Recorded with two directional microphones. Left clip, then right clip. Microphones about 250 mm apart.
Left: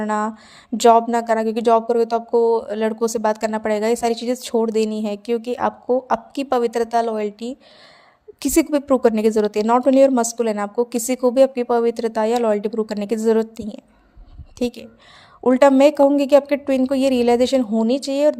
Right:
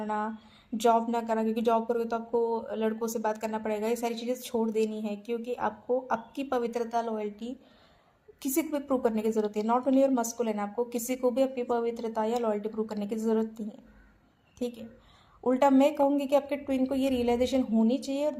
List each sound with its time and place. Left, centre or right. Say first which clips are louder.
0.0 s speech: left 10 dB; left
15.4 s speech: left 11 dB; left